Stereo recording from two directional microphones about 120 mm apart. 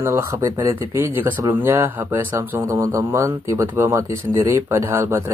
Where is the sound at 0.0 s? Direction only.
25° right (ahead or behind).